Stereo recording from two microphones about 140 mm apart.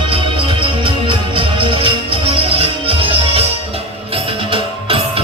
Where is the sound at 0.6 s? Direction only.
40° right (ahead or behind).